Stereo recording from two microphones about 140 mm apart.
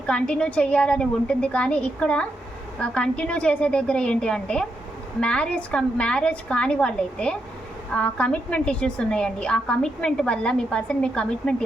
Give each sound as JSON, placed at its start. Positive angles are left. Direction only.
{"t": 0.0, "sound": "a woman's voice", "side_deg": 5}